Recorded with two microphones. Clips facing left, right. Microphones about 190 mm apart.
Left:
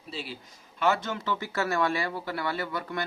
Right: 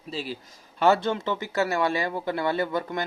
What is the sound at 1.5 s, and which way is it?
Speech, 20° right (ahead or behind).